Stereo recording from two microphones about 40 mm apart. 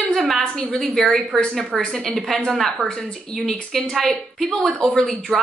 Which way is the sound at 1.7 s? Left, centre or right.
Centre.